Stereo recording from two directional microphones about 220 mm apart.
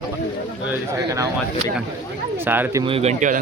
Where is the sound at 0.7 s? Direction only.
15° right (ahead or behind).